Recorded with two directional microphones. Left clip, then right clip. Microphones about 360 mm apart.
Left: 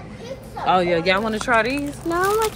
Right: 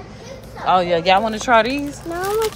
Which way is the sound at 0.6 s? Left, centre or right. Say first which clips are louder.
Right 3 dB; centre.